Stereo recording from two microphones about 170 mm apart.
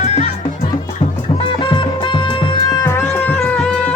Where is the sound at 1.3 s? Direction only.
30° left (ahead or behind); by 3.9 s 5° left (ahead or behind).